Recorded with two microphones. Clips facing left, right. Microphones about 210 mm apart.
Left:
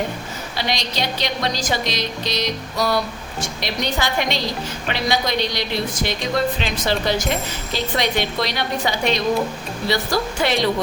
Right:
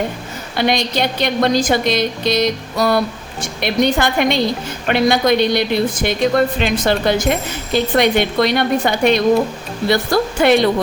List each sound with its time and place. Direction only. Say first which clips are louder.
0.5 s a woman's voice: right 9 dB; 55° right (ahead or behind)